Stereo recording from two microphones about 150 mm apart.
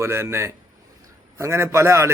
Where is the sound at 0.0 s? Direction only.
15° right (ahead or behind).